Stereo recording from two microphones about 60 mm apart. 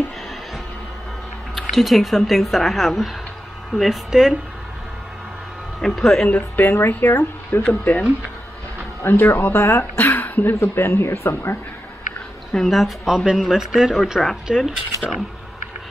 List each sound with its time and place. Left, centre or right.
1.5 s speech: centre
5.8 s speech: centre
6.2 s speech: left
7.6 s speech: left
9.0 s speech: left
12.5 s speech: centre